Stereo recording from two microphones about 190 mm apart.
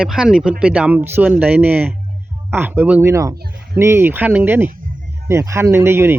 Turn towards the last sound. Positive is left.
turn(degrees=-10)  # may be behind; listen again after turning